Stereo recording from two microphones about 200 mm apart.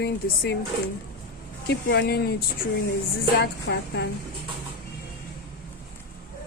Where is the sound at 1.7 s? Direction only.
55° left (ahead or behind).